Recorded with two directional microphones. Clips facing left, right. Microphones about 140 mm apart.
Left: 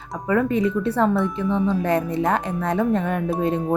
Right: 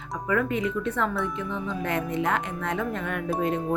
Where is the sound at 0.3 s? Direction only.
35° left (ahead or behind).